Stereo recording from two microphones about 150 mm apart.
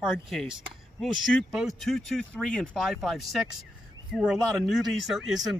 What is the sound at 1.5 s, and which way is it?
Speech, centre (ahead or behind).